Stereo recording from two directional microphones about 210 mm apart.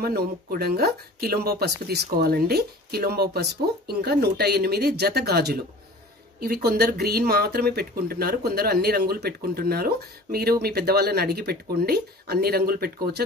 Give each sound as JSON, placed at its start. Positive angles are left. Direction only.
{"t": 0.0, "sound": "speech", "side_deg": -45}